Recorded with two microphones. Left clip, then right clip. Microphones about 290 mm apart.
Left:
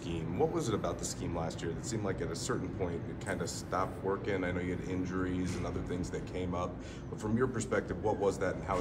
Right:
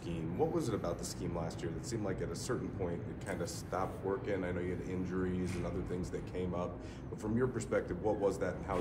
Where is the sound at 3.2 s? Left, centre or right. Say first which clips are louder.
Left 3 dB; left.